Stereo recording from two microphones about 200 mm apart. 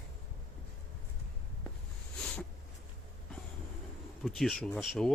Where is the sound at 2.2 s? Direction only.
5° left (ahead or behind).